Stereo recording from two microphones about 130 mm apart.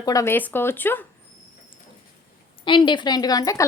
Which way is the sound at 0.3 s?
15° left (ahead or behind).